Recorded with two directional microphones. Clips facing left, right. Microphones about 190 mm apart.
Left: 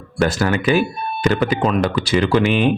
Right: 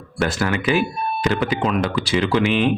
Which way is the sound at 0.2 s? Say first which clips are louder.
Left 3 dB; 40° left (ahead or behind).